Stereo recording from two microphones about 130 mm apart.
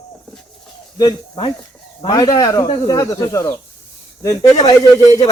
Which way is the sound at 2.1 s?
30° left (ahead or behind).